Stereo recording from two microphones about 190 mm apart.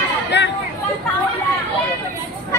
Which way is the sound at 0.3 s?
65° left (ahead or behind).